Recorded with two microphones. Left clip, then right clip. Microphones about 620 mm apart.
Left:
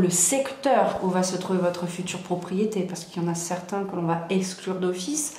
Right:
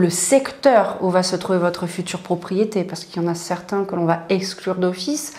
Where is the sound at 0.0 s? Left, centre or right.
Right.